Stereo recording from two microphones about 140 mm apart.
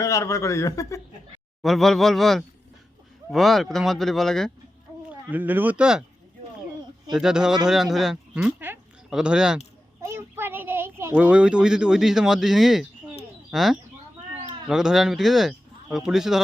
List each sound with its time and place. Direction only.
0.0 s a man's voice: 20° left (ahead or behind)
1.6 s speech: centre (ahead or behind)
5.3 s speech: 15° right (ahead or behind)
7.1 s speech: 5° right (ahead or behind)
10.0 s a child's voice: 15° right (ahead or behind)